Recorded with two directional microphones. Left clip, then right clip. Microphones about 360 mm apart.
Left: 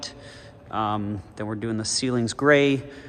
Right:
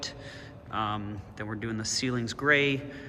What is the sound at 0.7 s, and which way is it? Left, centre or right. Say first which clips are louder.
A man's voice: left 6 dB; centre.